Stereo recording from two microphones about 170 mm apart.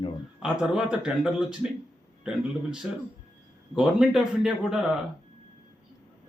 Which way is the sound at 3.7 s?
5° right (ahead or behind).